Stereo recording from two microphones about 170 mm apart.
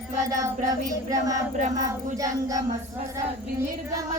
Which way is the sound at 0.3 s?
20° right (ahead or behind).